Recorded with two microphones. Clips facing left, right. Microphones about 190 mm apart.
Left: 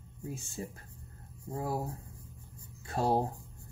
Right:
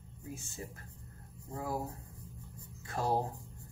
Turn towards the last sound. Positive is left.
turn(degrees=30)  # may be behind; listen again after turning